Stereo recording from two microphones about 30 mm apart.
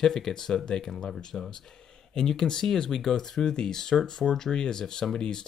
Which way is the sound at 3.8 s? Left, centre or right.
Centre.